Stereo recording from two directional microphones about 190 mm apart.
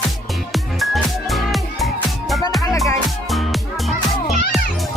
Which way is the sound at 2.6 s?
15° left (ahead or behind).